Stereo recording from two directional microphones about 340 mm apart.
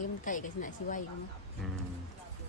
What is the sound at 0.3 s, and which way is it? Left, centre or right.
Speech, left.